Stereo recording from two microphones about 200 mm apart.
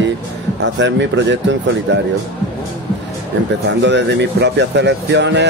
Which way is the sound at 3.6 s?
60° right (ahead or behind).